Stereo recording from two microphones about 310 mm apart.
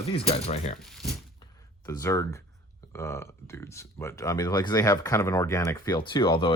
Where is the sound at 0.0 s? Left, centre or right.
Centre.